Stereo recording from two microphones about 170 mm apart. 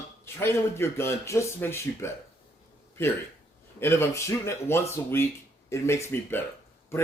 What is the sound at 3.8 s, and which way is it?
A man's voice, 15° left (ahead or behind).